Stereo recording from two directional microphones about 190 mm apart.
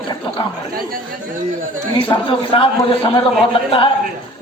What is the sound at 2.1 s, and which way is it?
A man's voice, 20° left (ahead or behind).